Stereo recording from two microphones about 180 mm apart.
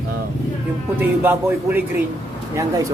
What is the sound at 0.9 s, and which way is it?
A man's voice, 10° right (ahead or behind).